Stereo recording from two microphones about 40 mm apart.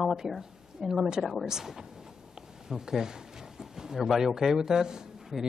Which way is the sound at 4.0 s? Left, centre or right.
Centre.